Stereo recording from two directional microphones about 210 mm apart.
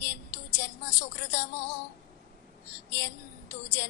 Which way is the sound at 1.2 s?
55° left (ahead or behind).